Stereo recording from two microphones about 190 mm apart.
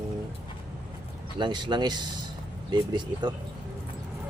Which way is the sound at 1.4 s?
25° right (ahead or behind).